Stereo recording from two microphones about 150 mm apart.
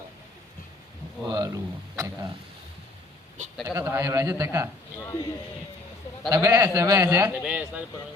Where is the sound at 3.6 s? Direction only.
20° right (ahead or behind).